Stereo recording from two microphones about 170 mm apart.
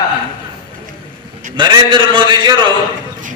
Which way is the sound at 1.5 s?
25° right (ahead or behind).